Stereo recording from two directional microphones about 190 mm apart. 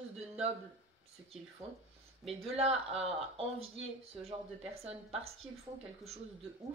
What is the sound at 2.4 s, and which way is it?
Speech, 35° right (ahead or behind).